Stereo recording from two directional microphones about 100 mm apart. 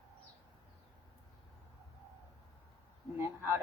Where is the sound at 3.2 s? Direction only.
25° right (ahead or behind).